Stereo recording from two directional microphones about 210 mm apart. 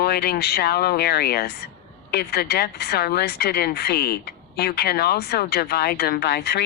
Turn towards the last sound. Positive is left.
turn(degrees=50)  # may be behind; listen again after turning